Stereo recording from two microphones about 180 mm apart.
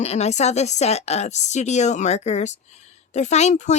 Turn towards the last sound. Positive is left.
turn(degrees=40)  # may be behind; listen again after turning